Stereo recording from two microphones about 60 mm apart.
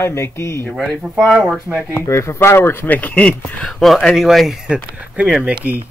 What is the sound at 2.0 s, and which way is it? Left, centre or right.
Speech, left.